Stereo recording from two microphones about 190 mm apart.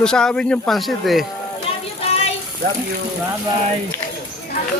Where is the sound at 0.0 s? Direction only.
5° left (ahead or behind).